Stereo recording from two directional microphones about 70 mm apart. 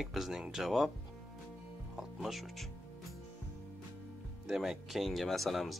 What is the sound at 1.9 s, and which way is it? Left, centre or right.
Speech, centre.